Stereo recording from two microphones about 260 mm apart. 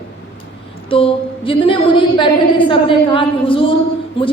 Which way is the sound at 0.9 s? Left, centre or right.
Centre.